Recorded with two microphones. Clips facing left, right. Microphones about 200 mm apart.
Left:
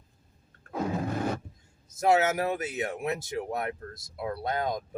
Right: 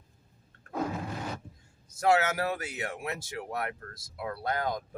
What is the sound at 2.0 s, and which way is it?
Speech, 20° left (ahead or behind).